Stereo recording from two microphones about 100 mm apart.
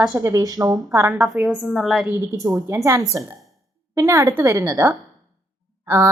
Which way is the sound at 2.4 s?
40° right (ahead or behind).